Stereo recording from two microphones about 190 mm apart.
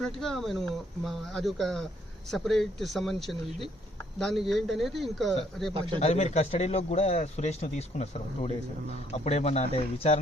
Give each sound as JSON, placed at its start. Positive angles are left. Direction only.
{"t": 0.0, "sound": "speech", "side_deg": 0}
{"t": 6.0, "sound": "a man's voice", "side_deg": 35}